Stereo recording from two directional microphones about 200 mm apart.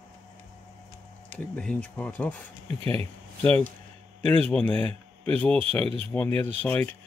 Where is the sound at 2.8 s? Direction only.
30° right (ahead or behind).